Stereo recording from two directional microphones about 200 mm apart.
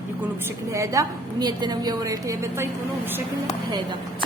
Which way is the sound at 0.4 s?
15° right (ahead or behind).